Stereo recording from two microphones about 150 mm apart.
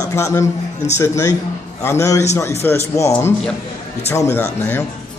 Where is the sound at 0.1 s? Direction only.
20° left (ahead or behind).